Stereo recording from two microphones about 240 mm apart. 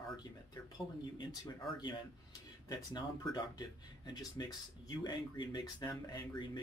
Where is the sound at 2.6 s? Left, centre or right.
Centre.